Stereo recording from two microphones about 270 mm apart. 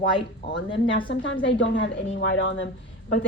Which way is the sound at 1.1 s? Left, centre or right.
Left.